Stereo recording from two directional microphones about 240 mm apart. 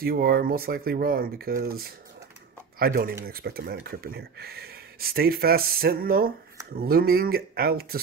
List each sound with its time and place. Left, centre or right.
0.0 s speech: right